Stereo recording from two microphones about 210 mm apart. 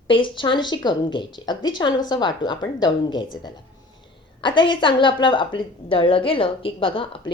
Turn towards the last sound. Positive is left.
turn(degrees=25)  # may be behind; listen again after turning